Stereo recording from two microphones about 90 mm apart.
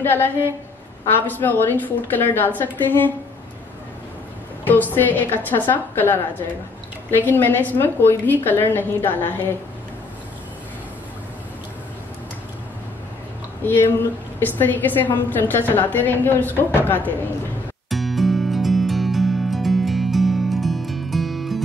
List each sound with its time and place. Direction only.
0.0 s a woman's voice: 20° left (ahead or behind)
4.6 s a woman's voice: 20° left (ahead or behind)
13.7 s a woman's voice: 25° left (ahead or behind)
17.8 s music: centre (ahead or behind)